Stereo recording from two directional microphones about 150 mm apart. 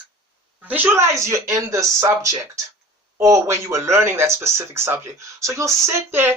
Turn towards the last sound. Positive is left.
turn(degrees=-15)  # may be behind; listen again after turning